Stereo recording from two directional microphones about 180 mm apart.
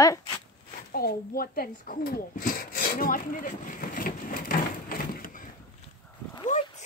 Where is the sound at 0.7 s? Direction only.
55° left (ahead or behind).